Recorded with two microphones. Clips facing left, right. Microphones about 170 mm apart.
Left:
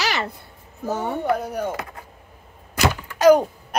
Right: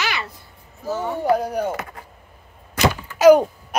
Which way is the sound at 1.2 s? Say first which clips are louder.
Right 6 dB; centre (ahead or behind).